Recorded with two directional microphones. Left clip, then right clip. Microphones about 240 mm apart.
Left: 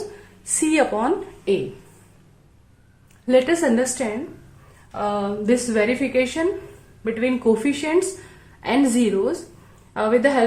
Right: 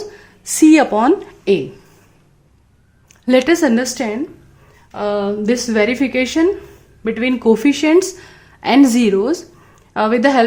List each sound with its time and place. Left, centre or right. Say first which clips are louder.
0.4 s a woman's voice: right 9 dB; right
3.2 s a woman's voice: right 4 dB; right